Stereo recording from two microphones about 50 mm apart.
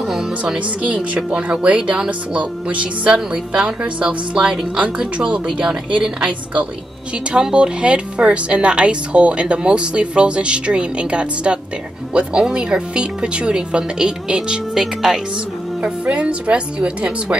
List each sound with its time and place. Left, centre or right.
0.0 s speech: centre
1.1 s a woman's voice: right; by 15.1 s centre
15.8 s speech: right